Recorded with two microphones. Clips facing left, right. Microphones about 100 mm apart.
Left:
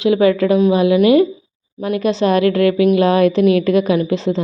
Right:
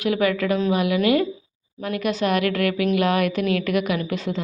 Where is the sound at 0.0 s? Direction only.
25° left (ahead or behind).